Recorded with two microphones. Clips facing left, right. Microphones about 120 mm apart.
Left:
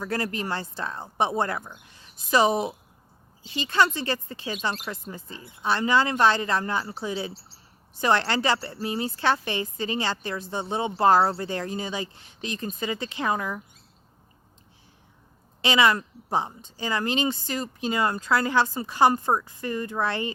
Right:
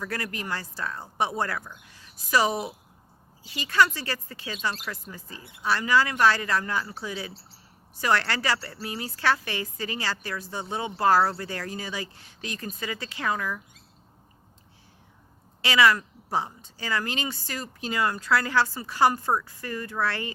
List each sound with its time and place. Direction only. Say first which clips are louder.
0.0 s a woman's voice: left 4 dB; 25° left (ahead or behind)
15.6 s a woman's voice: even; 20° left (ahead or behind)